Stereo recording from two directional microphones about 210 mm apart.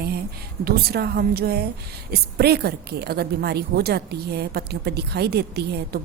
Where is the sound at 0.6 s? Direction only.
45° right (ahead or behind).